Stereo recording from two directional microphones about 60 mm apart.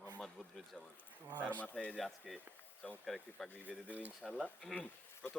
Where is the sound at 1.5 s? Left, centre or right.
Left.